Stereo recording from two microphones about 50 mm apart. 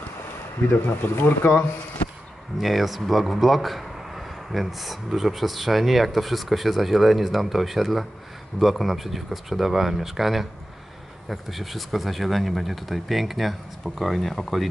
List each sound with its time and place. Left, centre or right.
0.7 s speech: left
2.6 s a man's voice: centre